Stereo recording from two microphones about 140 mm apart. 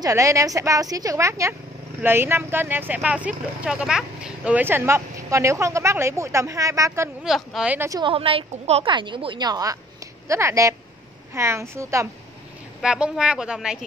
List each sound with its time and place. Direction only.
0.0 s a woman's voice: 20° right (ahead or behind)
7.2 s speech: centre (ahead or behind)
7.7 s speech: 20° right (ahead or behind)
8.0 s a woman's voice: 40° right (ahead or behind)
8.9 s a woman's voice: 35° right (ahead or behind)
12.8 s speech: 5° right (ahead or behind)